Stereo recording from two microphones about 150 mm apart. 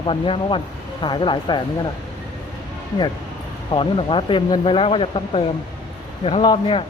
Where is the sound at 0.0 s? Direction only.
35° left (ahead or behind).